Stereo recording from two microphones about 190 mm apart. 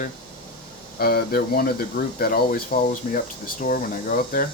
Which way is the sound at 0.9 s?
55° left (ahead or behind).